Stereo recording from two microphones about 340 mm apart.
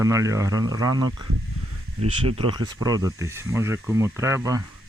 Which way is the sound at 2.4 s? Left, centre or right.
Centre.